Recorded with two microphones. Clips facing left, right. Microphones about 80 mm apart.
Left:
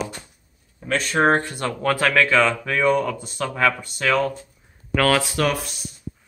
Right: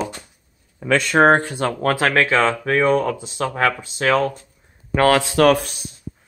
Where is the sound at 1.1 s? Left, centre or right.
Right.